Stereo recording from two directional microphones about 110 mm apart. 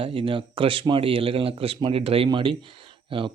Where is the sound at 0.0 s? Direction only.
55° right (ahead or behind).